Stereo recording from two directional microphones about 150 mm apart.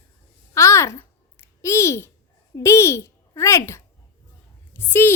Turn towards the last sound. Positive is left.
turn(degrees=15)  # may be behind; listen again after turning